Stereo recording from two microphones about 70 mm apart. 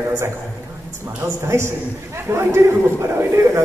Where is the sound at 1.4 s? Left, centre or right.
Right.